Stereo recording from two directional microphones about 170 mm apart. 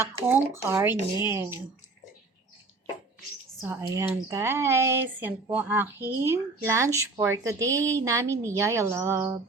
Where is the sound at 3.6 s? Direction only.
15° right (ahead or behind).